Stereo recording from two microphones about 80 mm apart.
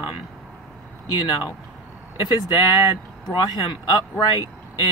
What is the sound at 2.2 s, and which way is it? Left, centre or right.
Speech, left.